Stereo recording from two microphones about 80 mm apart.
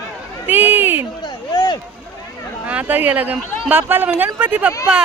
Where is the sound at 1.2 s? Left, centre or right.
Left.